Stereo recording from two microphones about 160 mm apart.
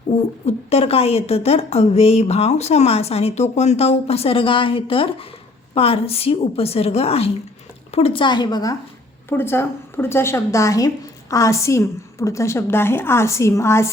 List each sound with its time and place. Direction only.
0.4 s a woman's voice: 40° left (ahead or behind)
9.3 s a woman's voice: 15° left (ahead or behind)